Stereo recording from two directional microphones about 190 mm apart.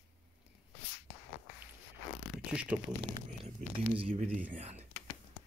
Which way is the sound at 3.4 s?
30° right (ahead or behind).